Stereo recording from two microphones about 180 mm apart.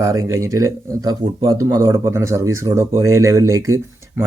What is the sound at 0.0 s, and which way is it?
Speech, 20° right (ahead or behind).